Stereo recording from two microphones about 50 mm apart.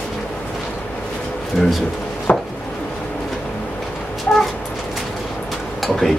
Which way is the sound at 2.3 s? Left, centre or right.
Left.